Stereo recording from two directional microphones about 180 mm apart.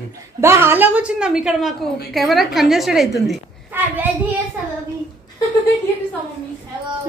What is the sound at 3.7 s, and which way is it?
Speech, 10° right (ahead or behind).